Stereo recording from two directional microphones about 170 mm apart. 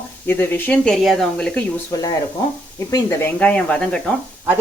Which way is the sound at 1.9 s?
20° left (ahead or behind).